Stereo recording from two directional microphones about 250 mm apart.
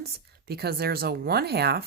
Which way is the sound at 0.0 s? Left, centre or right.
Right.